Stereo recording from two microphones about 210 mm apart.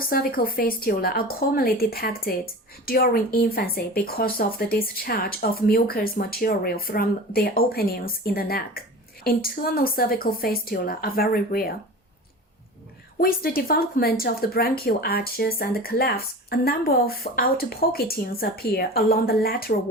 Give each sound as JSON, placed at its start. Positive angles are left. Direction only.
{"t": 0.0, "sound": "speech", "side_deg": 45}
{"t": 13.1, "sound": "speech", "side_deg": 45}